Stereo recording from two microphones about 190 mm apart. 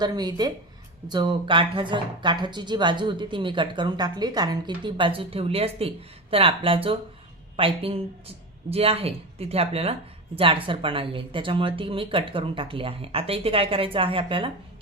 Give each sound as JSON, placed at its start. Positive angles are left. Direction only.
{"t": 0.0, "sound": "speech", "side_deg": -20}